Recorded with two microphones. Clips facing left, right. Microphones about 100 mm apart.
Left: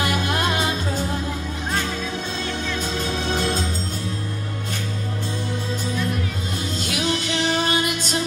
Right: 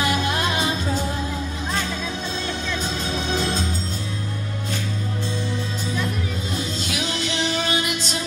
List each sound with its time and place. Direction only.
6.8 s music: 50° left (ahead or behind)